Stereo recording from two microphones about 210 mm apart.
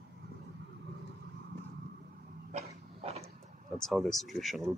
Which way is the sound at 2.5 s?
30° right (ahead or behind).